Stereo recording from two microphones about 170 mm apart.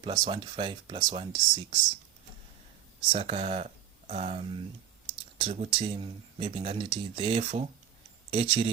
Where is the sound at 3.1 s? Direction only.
35° right (ahead or behind).